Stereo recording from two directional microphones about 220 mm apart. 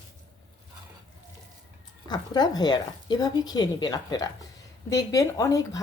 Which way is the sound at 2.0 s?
20° left (ahead or behind).